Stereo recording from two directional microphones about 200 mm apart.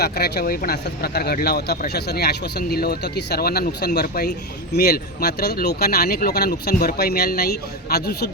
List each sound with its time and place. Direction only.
0.0 s speech: 50° left (ahead or behind)